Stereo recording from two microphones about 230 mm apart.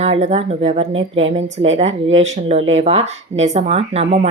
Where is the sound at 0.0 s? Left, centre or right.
Right.